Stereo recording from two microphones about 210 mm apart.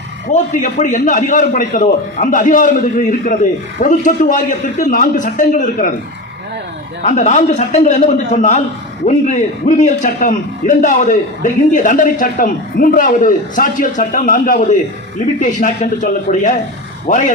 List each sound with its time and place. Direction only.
0.5 s a man's voice: 35° left (ahead or behind)
7.0 s a man's voice: 35° left (ahead or behind)